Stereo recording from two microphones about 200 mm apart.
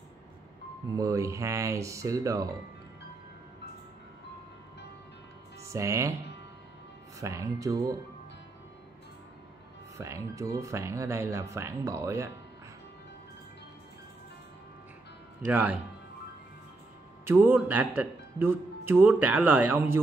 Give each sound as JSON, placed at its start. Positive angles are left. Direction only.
{"t": 0.9, "sound": "speech", "side_deg": -15}
{"t": 5.6, "sound": "speech", "side_deg": -15}
{"t": 7.2, "sound": "speech", "side_deg": -15}
{"t": 9.9, "sound": "speech", "side_deg": -15}
{"t": 15.4, "sound": "speech", "side_deg": -5}
{"t": 17.3, "sound": "speech", "side_deg": -10}